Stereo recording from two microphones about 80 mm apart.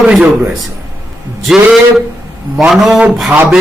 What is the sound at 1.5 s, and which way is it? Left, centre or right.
Speech, centre.